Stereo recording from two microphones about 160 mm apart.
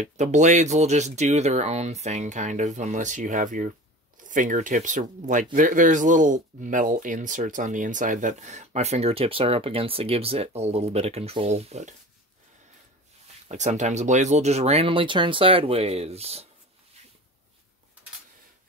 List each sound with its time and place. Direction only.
0.0 s speech: 50° right (ahead or behind)
13.5 s speech: 45° right (ahead or behind)